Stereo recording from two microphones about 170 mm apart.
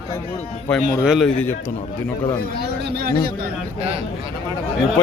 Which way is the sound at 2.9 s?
70° right (ahead or behind).